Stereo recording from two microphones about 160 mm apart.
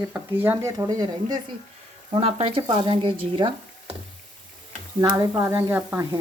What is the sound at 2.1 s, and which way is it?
Speech, 40° right (ahead or behind).